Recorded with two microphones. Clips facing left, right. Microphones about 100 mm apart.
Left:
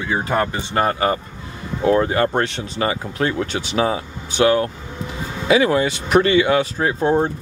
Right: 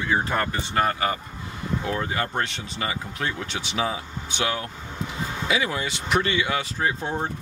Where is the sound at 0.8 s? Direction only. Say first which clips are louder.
Left 5 dB; 35° left (ahead or behind).